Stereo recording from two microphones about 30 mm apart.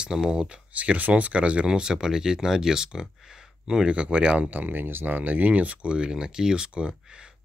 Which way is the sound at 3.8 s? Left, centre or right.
Right.